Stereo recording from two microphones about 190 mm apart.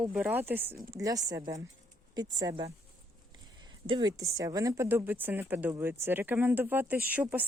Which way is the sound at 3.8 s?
25° right (ahead or behind).